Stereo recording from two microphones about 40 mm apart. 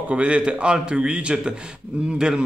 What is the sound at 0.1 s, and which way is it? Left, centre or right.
A man's voice, right.